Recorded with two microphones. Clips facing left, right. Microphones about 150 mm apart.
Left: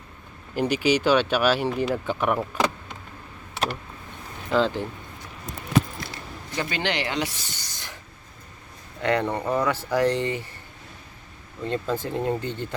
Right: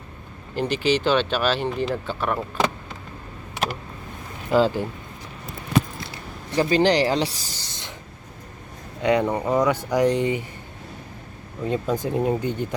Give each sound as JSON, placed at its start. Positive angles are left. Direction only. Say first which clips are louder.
{"t": 0.5, "sound": "speech", "louder": "even", "side_deg": 10}
{"t": 4.4, "sound": "speech", "louder": "right 3 dB", "side_deg": -10}
{"t": 6.5, "sound": "speech", "louder": "right 9 dB", "side_deg": -35}
{"t": 9.0, "sound": "speech", "louder": "right 3 dB", "side_deg": -15}
{"t": 11.6, "sound": "speech", "louder": "right 3 dB", "side_deg": -10}